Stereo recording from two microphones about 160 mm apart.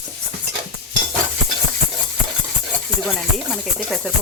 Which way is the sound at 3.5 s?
Centre (ahead or behind).